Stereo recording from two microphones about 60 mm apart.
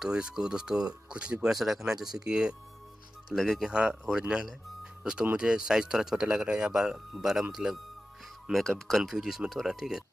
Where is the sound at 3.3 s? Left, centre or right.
Centre.